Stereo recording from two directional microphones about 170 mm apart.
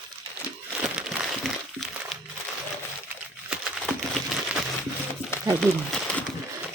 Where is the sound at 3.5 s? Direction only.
Centre (ahead or behind).